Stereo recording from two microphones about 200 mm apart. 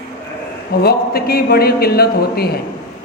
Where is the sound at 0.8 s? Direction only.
50° left (ahead or behind).